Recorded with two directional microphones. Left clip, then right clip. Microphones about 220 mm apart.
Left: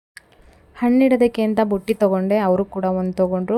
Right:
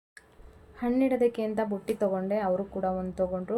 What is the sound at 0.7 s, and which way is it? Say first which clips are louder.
A woman's voice: left 10 dB; 40° left (ahead or behind).